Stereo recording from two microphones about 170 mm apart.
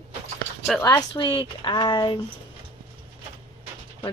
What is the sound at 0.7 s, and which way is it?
Speech, 20° left (ahead or behind).